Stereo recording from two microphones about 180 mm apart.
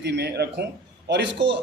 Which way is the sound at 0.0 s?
70° right (ahead or behind).